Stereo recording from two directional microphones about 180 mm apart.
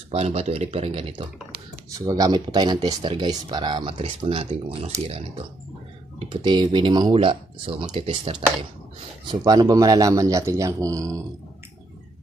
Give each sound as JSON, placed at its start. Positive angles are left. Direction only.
{"t": 0.1, "sound": "speech", "side_deg": -35}
{"t": 2.0, "sound": "speech", "side_deg": -20}
{"t": 6.1, "sound": "speech", "side_deg": -30}